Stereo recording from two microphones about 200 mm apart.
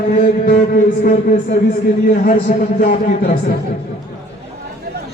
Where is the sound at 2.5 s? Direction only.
45° left (ahead or behind).